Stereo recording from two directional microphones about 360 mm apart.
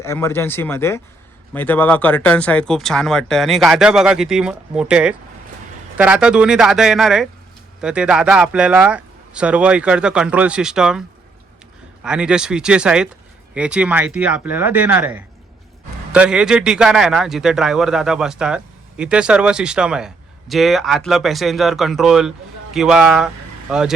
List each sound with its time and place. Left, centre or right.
0.0 s a man's voice: centre
12.0 s a man's voice: centre